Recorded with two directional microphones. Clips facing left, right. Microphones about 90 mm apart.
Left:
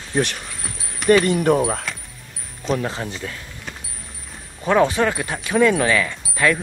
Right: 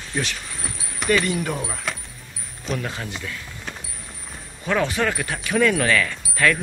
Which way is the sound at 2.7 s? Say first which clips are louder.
Left 5 dB; 30° left (ahead or behind).